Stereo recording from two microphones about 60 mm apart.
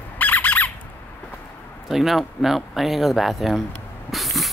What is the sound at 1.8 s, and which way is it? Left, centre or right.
Speech, centre.